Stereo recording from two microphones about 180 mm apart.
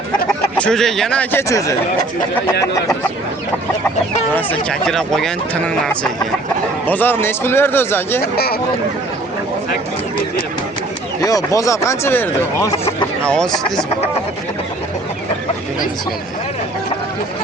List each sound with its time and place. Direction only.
0.3 s speech: 5° left (ahead or behind)
4.4 s speech: 5° left (ahead or behind)
8.2 s speech: 60° left (ahead or behind)
11.2 s speech: 20° left (ahead or behind); by 13.7 s 5° left (ahead or behind)